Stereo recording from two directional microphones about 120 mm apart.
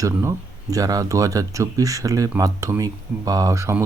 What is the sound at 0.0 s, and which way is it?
Speech, 25° right (ahead or behind).